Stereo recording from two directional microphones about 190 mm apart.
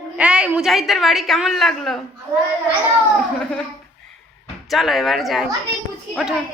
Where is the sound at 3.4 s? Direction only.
5° left (ahead or behind).